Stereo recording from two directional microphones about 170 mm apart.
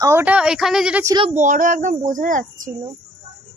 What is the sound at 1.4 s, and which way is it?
A child's voice, 50° right (ahead or behind).